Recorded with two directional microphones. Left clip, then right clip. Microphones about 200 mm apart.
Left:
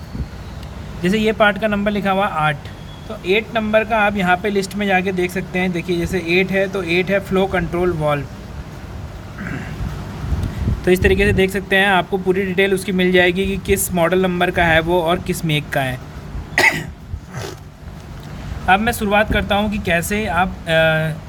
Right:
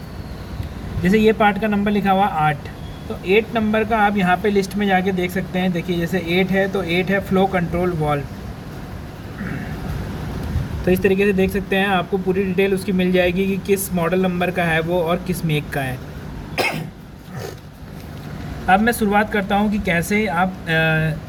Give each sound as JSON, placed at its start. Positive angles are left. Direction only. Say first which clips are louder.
{"t": 1.0, "sound": "speech", "louder": "even", "side_deg": 30}
{"t": 10.8, "sound": "speech", "louder": "left 2 dB", "side_deg": 40}
{"t": 16.6, "sound": "cough", "louder": "left 7 dB", "side_deg": 45}
{"t": 18.6, "sound": "speech", "louder": "left 1 dB", "side_deg": 30}